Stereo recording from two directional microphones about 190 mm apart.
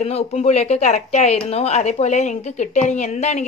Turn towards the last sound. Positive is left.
turn(degrees=35)  # may be behind; listen again after turning